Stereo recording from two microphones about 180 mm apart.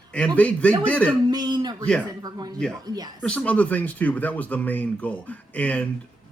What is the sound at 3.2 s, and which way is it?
Speech, 5° left (ahead or behind).